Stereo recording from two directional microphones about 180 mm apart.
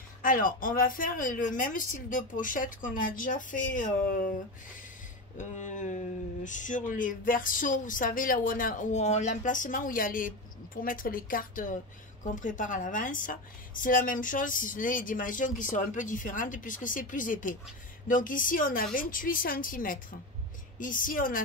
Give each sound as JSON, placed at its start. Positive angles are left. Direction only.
{"t": 0.2, "sound": "speech", "side_deg": 50}
{"t": 5.4, "sound": "speech", "side_deg": 45}